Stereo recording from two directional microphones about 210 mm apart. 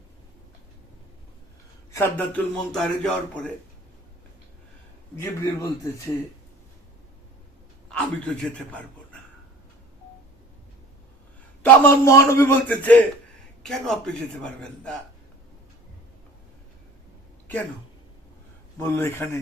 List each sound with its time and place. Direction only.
1.9 s a man's voice: 10° left (ahead or behind)
5.2 s a man's voice: 15° left (ahead or behind)
7.9 s a man's voice: 5° left (ahead or behind)
11.6 s a man's voice: 10° left (ahead or behind)
18.8 s a man's voice: 10° left (ahead or behind)